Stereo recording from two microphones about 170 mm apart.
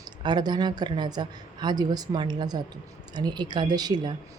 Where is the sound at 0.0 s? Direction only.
25° right (ahead or behind).